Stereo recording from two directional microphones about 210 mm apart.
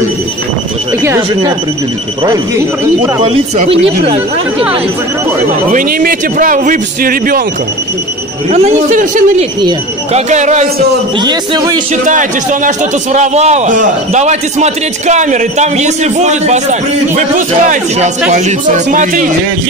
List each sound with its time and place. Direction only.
1.0 s speech: 15° right (ahead or behind)
3.2 s speech: 30° right (ahead or behind)
5.7 s a man's voice: 40° right (ahead or behind)
8.5 s a man's voice: 30° right (ahead or behind)
11.1 s speech: 20° right (ahead or behind)
12.0 s a man's voice: 35° right (ahead or behind)